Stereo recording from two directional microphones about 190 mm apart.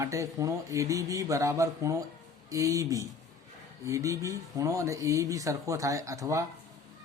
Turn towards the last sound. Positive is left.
turn(degrees=-15)  # may be behind; listen again after turning